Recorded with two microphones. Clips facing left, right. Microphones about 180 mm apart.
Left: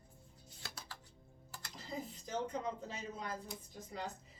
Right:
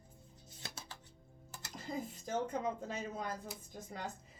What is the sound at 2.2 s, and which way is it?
A woman's voice, 50° right (ahead or behind).